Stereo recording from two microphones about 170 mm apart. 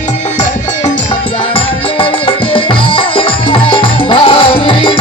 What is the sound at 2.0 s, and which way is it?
Music, 30° left (ahead or behind).